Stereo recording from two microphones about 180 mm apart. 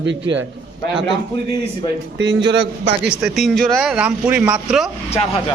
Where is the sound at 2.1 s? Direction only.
80° right.